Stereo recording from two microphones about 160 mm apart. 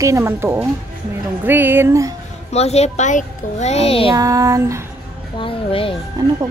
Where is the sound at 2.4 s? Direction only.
40° left (ahead or behind).